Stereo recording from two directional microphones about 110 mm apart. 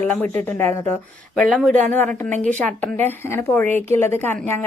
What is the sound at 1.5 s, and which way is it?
Speech, centre (ahead or behind).